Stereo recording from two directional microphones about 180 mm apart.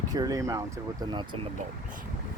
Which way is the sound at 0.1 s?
20° right (ahead or behind).